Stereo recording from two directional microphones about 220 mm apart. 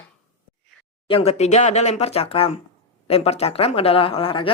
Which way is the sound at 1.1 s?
30° left (ahead or behind).